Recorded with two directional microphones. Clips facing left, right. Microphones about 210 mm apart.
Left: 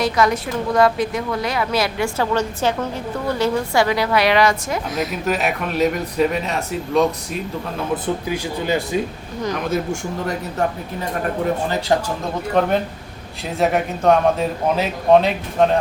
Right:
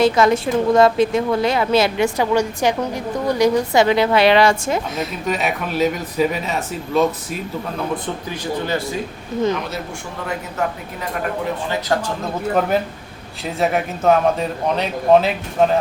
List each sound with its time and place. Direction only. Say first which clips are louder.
0.0 s a woman's voice: right 4 dB; 25° right (ahead or behind)
5.2 s speech: right 1 dB; centre (ahead or behind)
8.3 s speech: right 1 dB; 15° left (ahead or behind)
9.6 s speech: left 6 dB; 45° left (ahead or behind)
12.5 s speech: left 2 dB; 5° right (ahead or behind)